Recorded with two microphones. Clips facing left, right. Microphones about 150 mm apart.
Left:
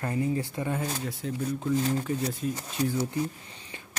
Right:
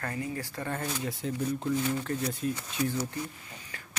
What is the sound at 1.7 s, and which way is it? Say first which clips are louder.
Speech: left 5 dB; 35° left (ahead or behind).